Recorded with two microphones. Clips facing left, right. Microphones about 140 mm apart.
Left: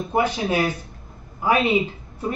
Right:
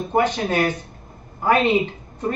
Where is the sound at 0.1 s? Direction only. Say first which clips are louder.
Right 2 dB; 10° left (ahead or behind).